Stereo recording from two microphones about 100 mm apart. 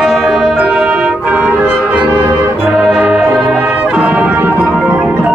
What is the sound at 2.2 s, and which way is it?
Music, 40° right (ahead or behind).